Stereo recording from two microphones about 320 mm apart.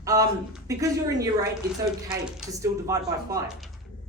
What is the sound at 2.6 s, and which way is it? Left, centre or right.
Speech, centre.